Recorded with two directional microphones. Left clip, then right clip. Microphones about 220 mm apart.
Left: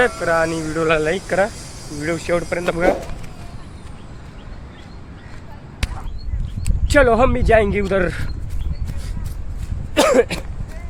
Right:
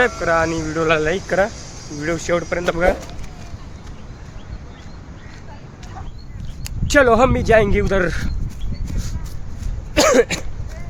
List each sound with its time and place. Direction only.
0.2 s speech: 10° right (ahead or behind)
1.5 s a sound: 50° left (ahead or behind)
2.0 s speech: 5° right (ahead or behind)
6.8 s speech: 15° right (ahead or behind)
9.9 s cough: 15° right (ahead or behind)